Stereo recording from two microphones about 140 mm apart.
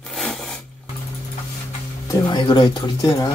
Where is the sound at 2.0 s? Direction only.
30° left (ahead or behind).